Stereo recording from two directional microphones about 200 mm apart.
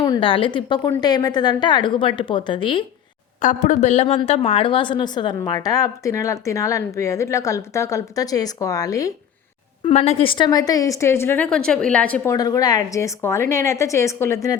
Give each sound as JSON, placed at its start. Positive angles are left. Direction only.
{"t": 0.0, "sound": "a woman's voice", "side_deg": 25}
{"t": 3.4, "sound": "a woman's voice", "side_deg": 35}
{"t": 9.8, "sound": "a woman's voice", "side_deg": 30}